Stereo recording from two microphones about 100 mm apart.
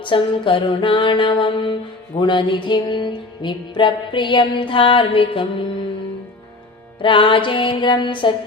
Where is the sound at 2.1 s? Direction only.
50° left (ahead or behind).